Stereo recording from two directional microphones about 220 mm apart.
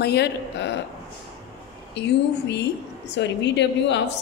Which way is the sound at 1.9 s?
50° left (ahead or behind).